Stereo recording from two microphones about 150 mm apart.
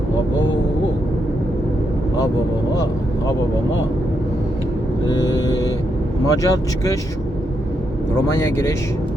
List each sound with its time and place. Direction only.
6.2 s speech: 20° left (ahead or behind)